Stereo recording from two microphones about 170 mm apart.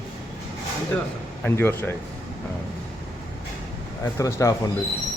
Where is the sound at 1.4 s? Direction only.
15° left (ahead or behind).